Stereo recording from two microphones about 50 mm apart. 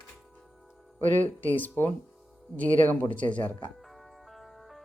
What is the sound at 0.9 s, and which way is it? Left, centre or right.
Speech, left.